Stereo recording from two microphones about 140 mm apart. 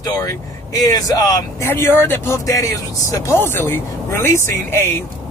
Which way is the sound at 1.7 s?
15° left (ahead or behind).